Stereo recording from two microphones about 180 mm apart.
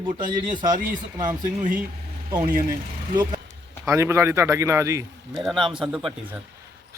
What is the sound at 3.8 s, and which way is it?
Speech, 15° right (ahead or behind).